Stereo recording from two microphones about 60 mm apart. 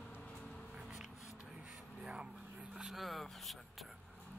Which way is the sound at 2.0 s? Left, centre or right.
Centre.